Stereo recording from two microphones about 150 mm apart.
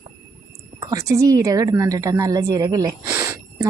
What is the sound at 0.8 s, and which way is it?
A woman's voice, 25° right (ahead or behind).